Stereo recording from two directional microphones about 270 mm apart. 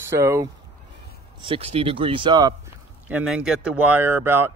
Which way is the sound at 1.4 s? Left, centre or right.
Right.